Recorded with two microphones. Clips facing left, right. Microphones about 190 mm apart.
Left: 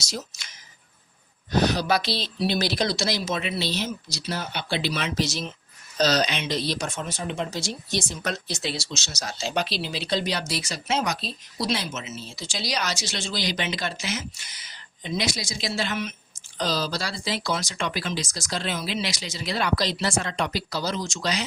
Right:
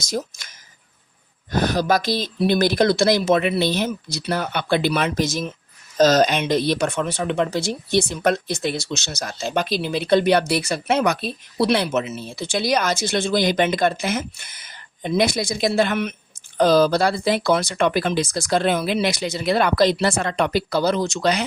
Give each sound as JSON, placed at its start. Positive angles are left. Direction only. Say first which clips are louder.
{"t": 0.0, "sound": "speech", "louder": "right 8 dB", "side_deg": -50}